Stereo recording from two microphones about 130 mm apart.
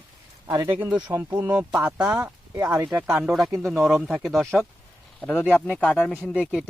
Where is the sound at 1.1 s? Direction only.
20° right (ahead or behind).